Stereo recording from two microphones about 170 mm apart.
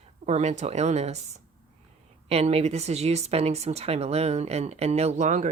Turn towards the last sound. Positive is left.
turn(degrees=-45)  # may be behind; listen again after turning